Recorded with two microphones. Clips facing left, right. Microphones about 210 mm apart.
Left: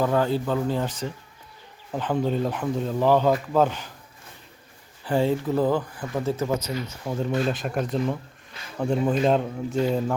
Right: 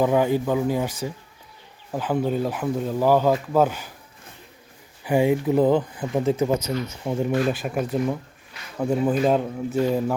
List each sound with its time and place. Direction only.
0.0 s speech: 15° right (ahead or behind)
5.0 s speech: 10° right (ahead or behind)